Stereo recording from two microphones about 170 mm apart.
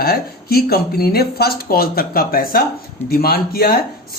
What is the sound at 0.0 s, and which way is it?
Speech, 65° left (ahead or behind).